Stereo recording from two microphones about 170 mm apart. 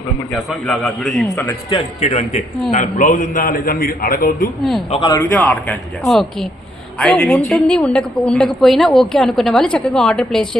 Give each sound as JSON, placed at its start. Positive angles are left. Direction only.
{"t": 0.7, "sound": "a woman's voice", "side_deg": 0}
{"t": 1.7, "sound": "a man's voice", "side_deg": 35}
{"t": 2.7, "sound": "a man's voice", "side_deg": 50}
{"t": 5.1, "sound": "a man's voice", "side_deg": 10}